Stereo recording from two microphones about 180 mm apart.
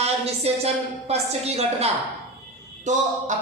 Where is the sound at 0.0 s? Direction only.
35° right (ahead or behind).